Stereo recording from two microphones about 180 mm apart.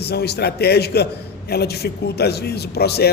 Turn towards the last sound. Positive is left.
turn(degrees=60)  # may be behind; listen again after turning